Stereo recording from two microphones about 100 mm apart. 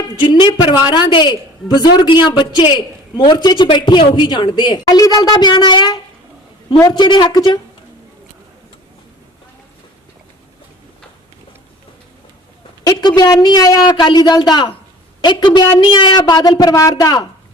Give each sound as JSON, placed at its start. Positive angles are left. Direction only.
{"t": 0.2, "sound": "a man's voice", "side_deg": 45}
{"t": 12.8, "sound": "a woman's voice", "side_deg": 45}
{"t": 13.9, "sound": "a man's voice", "side_deg": 50}